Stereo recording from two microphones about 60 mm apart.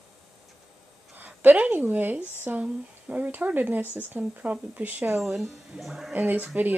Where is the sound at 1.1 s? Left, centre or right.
Right.